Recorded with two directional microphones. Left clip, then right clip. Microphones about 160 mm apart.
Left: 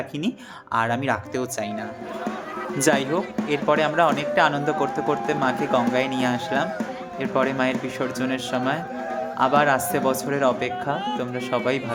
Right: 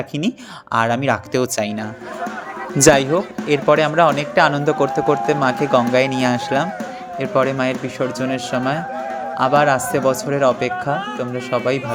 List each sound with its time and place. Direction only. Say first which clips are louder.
0.2 s speech: right 5 dB; 40° right (ahead or behind)
2.7 s speech: right 8 dB; 45° right (ahead or behind); by 11.9 s 25° right (ahead or behind)